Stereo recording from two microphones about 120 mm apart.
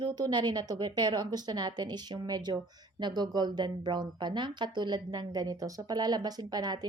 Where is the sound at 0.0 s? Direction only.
35° right (ahead or behind).